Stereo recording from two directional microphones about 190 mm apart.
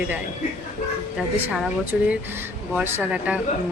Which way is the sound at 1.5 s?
5° right (ahead or behind).